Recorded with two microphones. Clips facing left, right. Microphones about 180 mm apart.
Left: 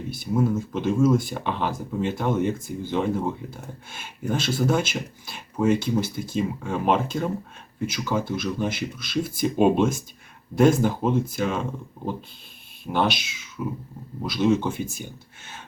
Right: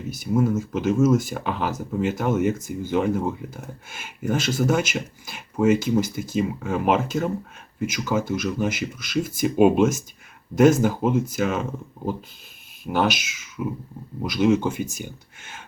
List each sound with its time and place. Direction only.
0.3 s speech: 5° right (ahead or behind)
12.8 s speech: 10° right (ahead or behind)